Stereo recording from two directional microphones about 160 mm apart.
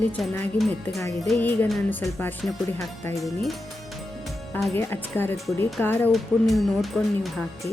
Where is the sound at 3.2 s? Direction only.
Centre (ahead or behind).